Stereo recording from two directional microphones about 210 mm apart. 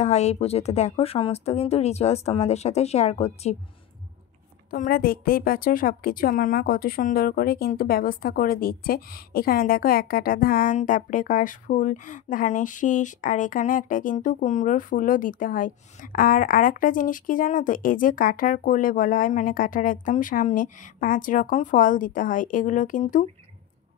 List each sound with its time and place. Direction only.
0.0 s a woman's voice: 30° left (ahead or behind)
4.6 s a woman's voice: 45° left (ahead or behind)